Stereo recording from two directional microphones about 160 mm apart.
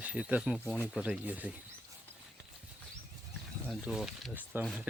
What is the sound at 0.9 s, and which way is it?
Speech, 5° right (ahead or behind).